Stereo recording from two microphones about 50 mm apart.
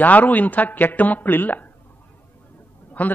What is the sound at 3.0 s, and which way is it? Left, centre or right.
Speech, left.